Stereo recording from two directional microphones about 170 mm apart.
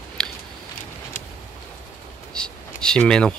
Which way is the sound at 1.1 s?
50° left (ahead or behind).